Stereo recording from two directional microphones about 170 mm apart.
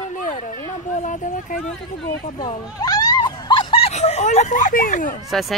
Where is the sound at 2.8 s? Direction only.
25° left (ahead or behind); by 5.2 s 50° left (ahead or behind).